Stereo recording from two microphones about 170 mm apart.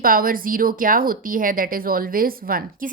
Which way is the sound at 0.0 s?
55° right (ahead or behind).